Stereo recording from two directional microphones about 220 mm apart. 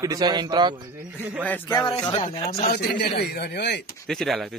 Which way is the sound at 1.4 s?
10° left (ahead or behind).